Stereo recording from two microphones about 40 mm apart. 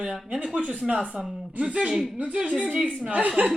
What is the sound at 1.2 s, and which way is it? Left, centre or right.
Speech, centre.